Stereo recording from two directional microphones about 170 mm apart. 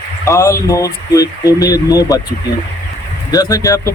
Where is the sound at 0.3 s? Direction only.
15° left (ahead or behind).